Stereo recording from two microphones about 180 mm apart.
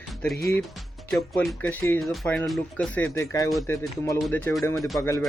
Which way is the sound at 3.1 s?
20° left (ahead or behind).